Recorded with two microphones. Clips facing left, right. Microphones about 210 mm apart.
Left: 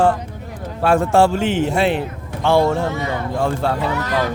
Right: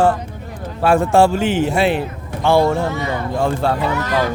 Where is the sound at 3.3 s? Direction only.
20° right (ahead or behind).